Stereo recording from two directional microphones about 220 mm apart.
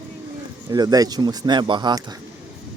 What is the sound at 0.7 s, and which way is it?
Speech, 15° right (ahead or behind).